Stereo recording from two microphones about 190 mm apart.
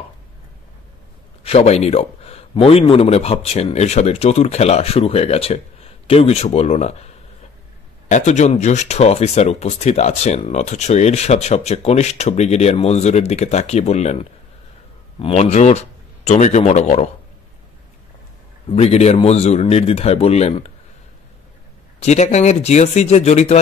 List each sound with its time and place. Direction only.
1.4 s speech: 30° left (ahead or behind)
8.1 s speech: 35° left (ahead or behind)
15.1 s a man's voice: 30° left (ahead or behind)
18.7 s speech: 35° left (ahead or behind)
22.0 s speech: 35° left (ahead or behind)